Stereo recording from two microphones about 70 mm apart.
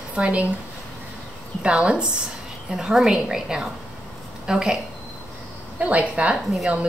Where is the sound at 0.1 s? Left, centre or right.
Centre.